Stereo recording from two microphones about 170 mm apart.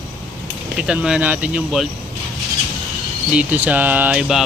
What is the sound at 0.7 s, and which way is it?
Speech, 5° right (ahead or behind).